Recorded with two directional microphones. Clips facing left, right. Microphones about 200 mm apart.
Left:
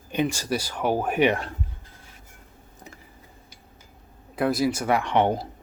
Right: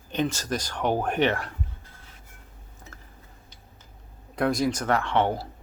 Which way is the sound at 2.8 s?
35° left (ahead or behind).